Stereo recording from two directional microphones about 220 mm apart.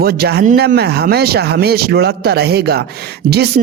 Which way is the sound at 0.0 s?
45° right (ahead or behind).